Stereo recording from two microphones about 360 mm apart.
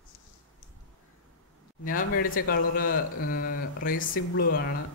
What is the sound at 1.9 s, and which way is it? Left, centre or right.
Speech, left.